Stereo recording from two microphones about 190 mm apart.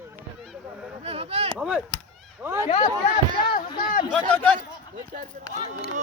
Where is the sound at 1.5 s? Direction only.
5° right (ahead or behind).